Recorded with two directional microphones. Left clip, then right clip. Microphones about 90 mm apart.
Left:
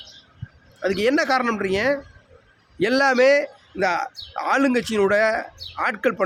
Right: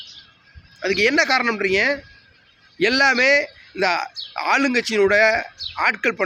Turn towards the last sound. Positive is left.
turn(degrees=25)  # may be behind; listen again after turning